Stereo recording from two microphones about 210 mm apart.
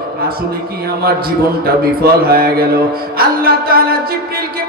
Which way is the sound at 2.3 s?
45° right (ahead or behind).